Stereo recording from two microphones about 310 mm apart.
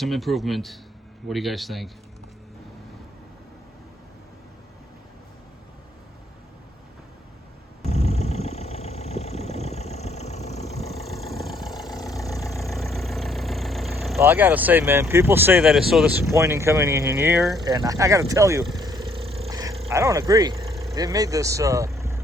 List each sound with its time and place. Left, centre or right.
0.0 s speech: centre
7.9 s vehicle: left
11.0 s vehicle: centre
11.6 s vehicle: centre
12.5 s speech: centre
17.6 s vehicle: centre
20.9 s speech: centre